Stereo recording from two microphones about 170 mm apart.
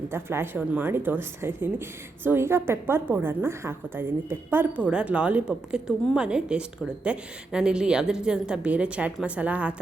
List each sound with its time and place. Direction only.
0.1 s a woman's voice: 15° right (ahead or behind)